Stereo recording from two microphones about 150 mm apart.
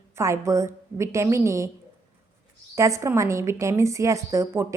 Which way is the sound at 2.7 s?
20° right (ahead or behind).